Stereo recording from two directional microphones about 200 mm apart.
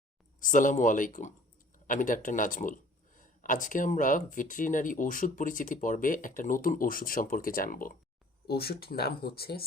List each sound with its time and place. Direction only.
0.3 s speech: 40° left (ahead or behind)